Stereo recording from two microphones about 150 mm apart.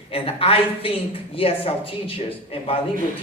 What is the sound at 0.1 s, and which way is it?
A man's voice, 40° left (ahead or behind).